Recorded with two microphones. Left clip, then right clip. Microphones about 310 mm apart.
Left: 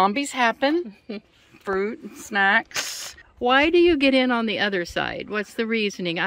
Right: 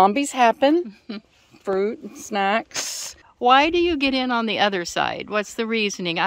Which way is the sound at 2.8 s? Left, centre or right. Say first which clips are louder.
Right 1 dB; right.